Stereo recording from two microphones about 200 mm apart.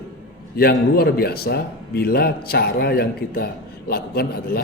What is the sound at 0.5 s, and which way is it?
A man's voice, 50° left (ahead or behind).